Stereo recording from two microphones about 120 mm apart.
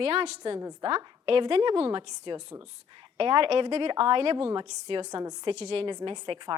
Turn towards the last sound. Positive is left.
turn(degrees=-40)  # may be behind; listen again after turning